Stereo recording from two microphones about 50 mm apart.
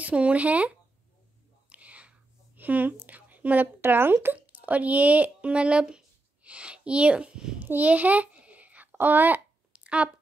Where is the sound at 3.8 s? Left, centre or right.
Right; by 7.5 s centre.